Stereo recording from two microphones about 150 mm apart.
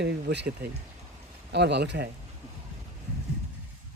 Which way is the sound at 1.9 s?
90° right.